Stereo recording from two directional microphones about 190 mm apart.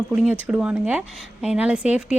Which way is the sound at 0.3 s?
5° right (ahead or behind).